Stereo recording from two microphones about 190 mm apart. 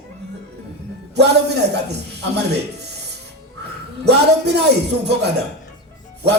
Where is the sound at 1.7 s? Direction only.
60° right (ahead or behind).